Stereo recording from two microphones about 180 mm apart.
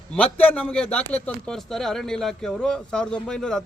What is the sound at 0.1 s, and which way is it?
A man's voice, 10° left (ahead or behind).